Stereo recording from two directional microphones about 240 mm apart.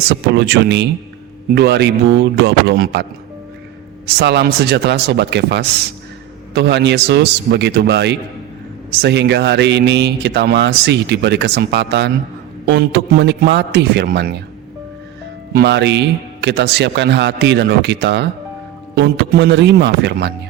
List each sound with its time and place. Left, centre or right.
0.1 s speech: right
15.5 s speech: right